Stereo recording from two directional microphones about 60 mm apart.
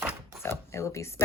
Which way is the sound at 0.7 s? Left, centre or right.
Left.